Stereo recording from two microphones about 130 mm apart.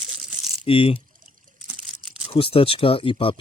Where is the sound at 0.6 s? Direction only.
45° left (ahead or behind).